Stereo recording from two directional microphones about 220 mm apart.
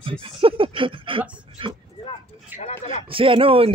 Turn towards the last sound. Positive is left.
turn(degrees=-25)  # may be behind; listen again after turning